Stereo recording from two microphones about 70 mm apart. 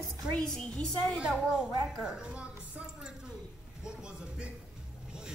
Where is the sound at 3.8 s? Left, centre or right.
Centre.